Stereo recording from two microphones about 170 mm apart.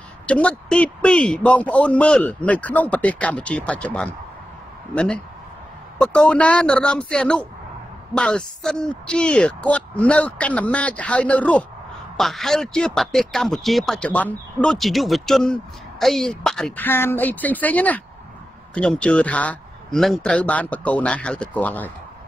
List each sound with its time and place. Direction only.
0.3 s a man's voice: 5° left (ahead or behind)